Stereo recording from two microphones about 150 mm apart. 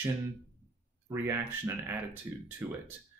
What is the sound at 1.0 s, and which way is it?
Speech, 15° right (ahead or behind).